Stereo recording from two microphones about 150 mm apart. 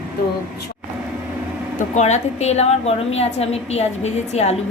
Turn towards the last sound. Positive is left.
turn(degrees=45)  # may be behind; listen again after turning